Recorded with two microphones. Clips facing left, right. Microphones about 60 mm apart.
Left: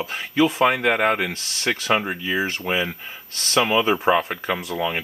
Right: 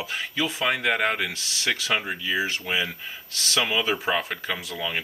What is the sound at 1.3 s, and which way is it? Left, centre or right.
A man's voice, left.